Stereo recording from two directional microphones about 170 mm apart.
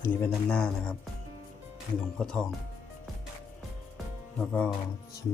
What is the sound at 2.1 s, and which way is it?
Speech, 5° left (ahead or behind).